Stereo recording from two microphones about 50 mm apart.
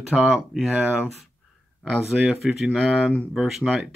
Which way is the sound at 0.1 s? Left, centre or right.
Centre.